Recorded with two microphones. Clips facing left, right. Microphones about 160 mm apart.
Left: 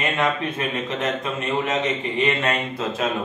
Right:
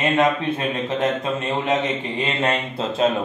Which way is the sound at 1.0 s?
30° right (ahead or behind).